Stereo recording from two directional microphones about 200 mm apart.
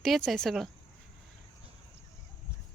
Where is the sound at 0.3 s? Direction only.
Centre (ahead or behind).